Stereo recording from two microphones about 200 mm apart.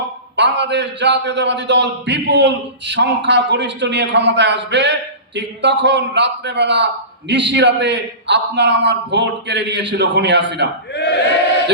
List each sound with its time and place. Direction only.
0.3 s a man's voice: 60° right (ahead or behind)
10.9 s crowd: 55° left (ahead or behind)